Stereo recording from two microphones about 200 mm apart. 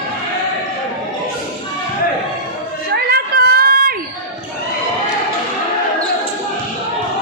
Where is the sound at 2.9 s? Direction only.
50° right (ahead or behind).